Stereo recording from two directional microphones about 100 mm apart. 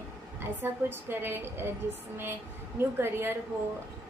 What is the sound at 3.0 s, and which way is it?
Speech, 25° right (ahead or behind).